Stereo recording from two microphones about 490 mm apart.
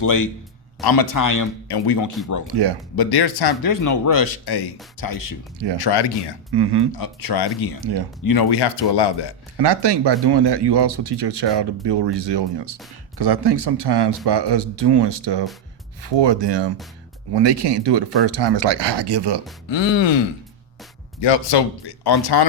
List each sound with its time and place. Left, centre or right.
0.0 s speech: left
2.5 s speech: right
2.9 s speech: left
5.8 s speech: left
6.5 s speech: right
7.0 s speech: left
9.6 s speech: right
19.6 s speech: left
21.2 s speech: left